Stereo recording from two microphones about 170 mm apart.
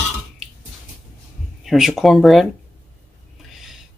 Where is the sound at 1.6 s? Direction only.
Centre (ahead or behind).